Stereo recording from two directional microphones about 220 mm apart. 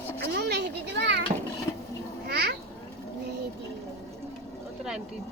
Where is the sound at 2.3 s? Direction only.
45° right (ahead or behind).